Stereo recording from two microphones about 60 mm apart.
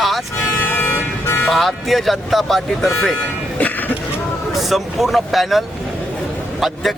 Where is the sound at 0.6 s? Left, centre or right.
Left.